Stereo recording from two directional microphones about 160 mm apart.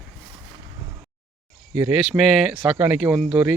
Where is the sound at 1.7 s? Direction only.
10° right (ahead or behind).